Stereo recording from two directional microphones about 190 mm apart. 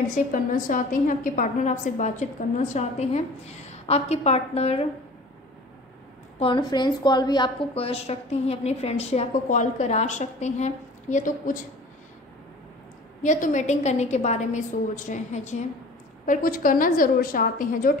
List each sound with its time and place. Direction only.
0.3 s a woman's voice: 45° left (ahead or behind)
6.4 s a woman's voice: 25° left (ahead or behind); by 11.6 s 45° left (ahead or behind)
13.2 s a woman's voice: 40° left (ahead or behind)